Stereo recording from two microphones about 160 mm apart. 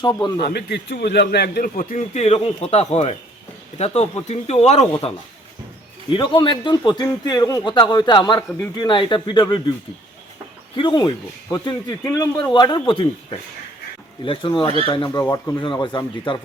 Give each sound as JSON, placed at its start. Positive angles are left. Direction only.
{"t": 0.0, "sound": "a man's voice", "side_deg": 25}
{"t": 0.3, "sound": "a man's voice", "side_deg": 85}
{"t": 6.1, "sound": "a man's voice", "side_deg": 30}
{"t": 10.8, "sound": "a man's voice", "side_deg": 30}
{"t": 12.0, "sound": "speech", "side_deg": 15}
{"t": 12.4, "sound": "a man's voice", "side_deg": 30}
{"t": 14.3, "sound": "a man's voice", "side_deg": 30}